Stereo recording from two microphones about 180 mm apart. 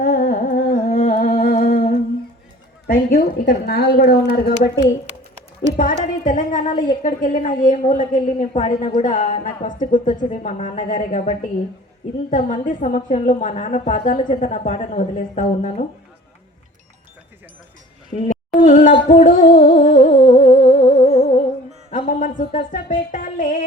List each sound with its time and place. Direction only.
0.0 s humming: 60° left (ahead or behind)
1.1 s a sound: 55° left (ahead or behind)
2.8 s speech: 55° left (ahead or behind)
5.7 s a woman's voice: 50° left (ahead or behind)
18.3 s music: 45° left (ahead or behind)
21.0 s music: 30° left (ahead or behind)
21.9 s speech: 45° left (ahead or behind)